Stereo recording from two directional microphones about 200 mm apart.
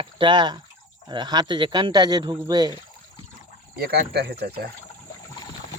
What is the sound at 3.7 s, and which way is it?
Speech, 50° right (ahead or behind).